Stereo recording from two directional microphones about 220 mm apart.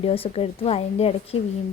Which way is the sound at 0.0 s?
25° left (ahead or behind).